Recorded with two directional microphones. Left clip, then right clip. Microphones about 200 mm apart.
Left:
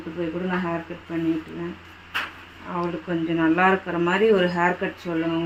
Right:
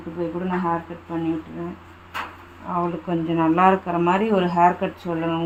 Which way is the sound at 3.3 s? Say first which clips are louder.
Right 2 dB; 40° right (ahead or behind).